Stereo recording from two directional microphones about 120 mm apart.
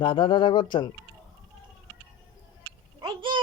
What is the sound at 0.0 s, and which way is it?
Speech, 40° left (ahead or behind).